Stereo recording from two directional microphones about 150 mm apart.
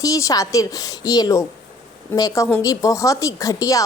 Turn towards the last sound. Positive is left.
turn(degrees=20)  # may be behind; listen again after turning